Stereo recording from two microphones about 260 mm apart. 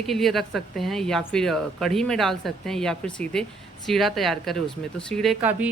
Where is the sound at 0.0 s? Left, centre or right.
Centre.